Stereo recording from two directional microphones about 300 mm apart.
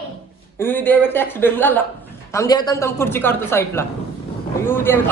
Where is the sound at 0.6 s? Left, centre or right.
Centre.